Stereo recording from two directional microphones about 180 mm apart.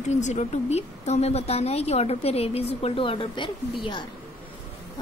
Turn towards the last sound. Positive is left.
turn(degrees=25)  # may be behind; listen again after turning